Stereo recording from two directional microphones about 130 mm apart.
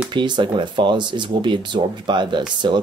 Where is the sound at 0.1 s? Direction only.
35° right (ahead or behind).